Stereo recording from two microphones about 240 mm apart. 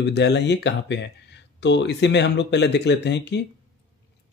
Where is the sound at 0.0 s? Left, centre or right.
Left.